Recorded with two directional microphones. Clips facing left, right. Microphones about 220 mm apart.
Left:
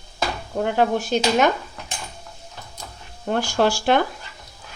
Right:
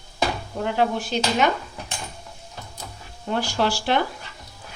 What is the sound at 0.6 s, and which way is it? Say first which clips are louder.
Speech: left 3 dB; 45° left (ahead or behind).